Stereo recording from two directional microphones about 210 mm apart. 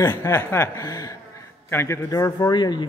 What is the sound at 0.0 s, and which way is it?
A man's voice, 15° left (ahead or behind).